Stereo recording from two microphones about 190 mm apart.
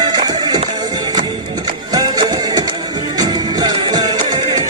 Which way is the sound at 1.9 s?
20° right (ahead or behind).